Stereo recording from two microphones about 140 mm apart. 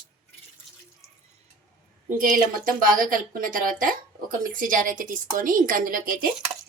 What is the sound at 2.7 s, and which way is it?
A woman's voice, 85° right.